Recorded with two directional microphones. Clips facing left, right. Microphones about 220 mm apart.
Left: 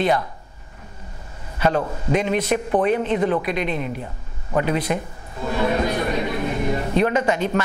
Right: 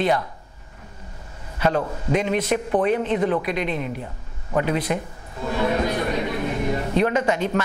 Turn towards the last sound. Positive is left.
turn(degrees=20)  # may be behind; listen again after turning